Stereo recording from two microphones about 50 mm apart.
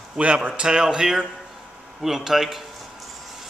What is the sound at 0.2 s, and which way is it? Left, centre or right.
Speech, right.